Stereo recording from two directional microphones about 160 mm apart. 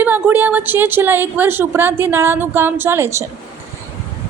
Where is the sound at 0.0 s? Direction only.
10° right (ahead or behind).